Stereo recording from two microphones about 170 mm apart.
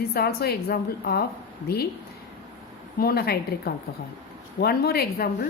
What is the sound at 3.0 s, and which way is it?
A woman's voice, 65° left (ahead or behind).